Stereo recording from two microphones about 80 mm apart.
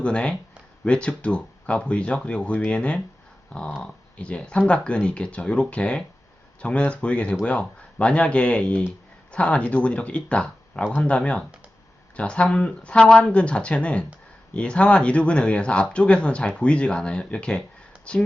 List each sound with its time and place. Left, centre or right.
0.0 s speech: centre